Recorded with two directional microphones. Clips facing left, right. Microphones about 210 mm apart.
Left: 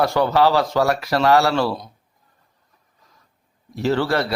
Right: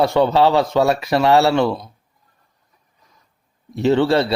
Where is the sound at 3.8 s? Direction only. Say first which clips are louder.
Right 5 dB; 20° right (ahead or behind).